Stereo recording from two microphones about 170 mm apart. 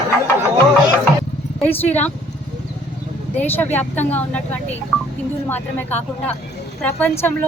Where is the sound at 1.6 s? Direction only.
10° left (ahead or behind).